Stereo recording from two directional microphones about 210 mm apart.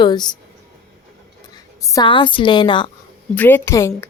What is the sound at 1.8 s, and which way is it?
A woman's voice, 15° left (ahead or behind).